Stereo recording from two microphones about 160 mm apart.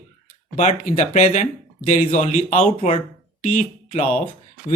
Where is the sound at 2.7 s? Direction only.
35° left (ahead or behind).